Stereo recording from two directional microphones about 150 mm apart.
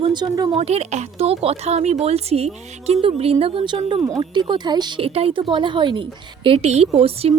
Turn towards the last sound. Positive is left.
turn(degrees=-40)  # may be behind; listen again after turning